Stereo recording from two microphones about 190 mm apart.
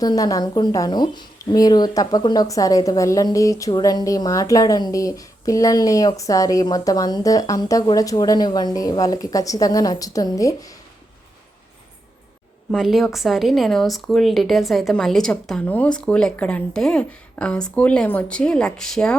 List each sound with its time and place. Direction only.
0.0 s a woman's voice: 20° left (ahead or behind)
12.7 s speech: centre (ahead or behind)